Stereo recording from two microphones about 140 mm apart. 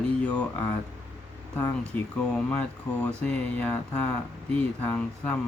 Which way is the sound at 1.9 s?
10° left (ahead or behind).